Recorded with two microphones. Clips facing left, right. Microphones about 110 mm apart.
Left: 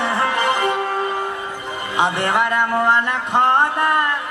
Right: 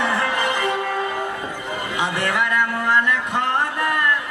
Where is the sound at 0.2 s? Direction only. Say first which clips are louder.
Left 3 dB; 35° left (ahead or behind).